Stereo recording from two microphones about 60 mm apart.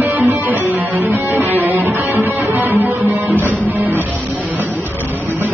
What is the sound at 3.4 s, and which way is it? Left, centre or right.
Music, right.